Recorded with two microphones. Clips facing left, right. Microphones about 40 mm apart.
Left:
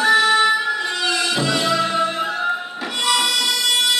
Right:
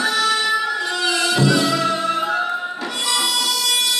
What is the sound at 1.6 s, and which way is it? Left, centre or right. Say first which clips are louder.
Music: left 1 dB; left.